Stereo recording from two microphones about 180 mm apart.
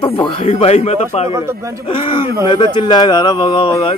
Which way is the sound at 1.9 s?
30° left (ahead or behind).